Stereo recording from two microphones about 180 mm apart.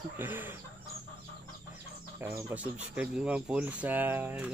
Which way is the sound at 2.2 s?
10° right (ahead or behind).